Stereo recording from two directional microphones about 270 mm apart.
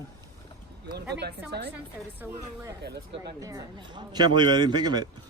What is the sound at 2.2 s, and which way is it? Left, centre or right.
A man's voice, centre.